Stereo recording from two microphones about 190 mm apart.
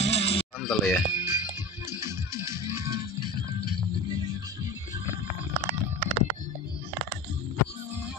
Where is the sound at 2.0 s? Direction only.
15° right (ahead or behind).